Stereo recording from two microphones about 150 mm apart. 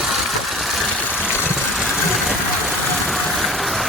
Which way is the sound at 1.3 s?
15° left (ahead or behind).